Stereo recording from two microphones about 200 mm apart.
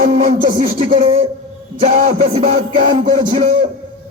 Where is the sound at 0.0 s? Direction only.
30° right (ahead or behind).